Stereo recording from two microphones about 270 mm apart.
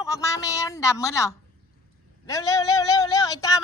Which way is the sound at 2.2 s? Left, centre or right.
Centre.